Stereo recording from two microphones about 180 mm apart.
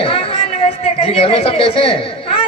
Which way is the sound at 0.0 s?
30° left (ahead or behind).